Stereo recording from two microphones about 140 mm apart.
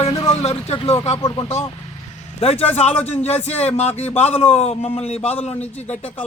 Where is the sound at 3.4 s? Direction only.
50° left (ahead or behind).